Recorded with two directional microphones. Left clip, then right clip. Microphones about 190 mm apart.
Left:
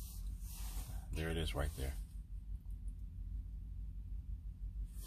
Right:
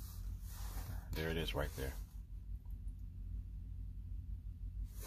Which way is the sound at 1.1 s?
10° right (ahead or behind).